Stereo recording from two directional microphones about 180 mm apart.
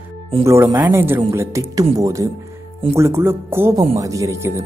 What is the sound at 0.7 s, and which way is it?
Speech, 10° right (ahead or behind).